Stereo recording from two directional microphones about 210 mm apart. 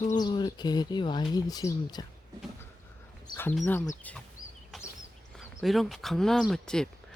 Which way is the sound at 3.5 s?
10° left (ahead or behind).